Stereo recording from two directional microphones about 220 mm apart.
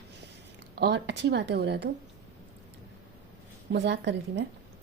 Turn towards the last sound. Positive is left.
turn(degrees=-55)  # may be behind; listen again after turning